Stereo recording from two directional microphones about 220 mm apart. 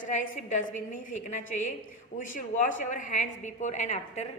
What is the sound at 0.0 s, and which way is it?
A woman's voice, 35° left (ahead or behind).